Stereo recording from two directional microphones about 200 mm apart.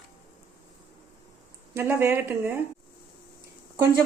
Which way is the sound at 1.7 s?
10° right (ahead or behind).